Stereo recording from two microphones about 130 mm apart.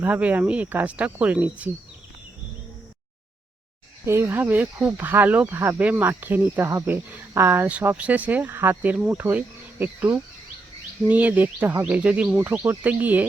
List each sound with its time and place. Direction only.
0.0 s speech: 10° right (ahead or behind)
4.0 s speech: 20° right (ahead or behind)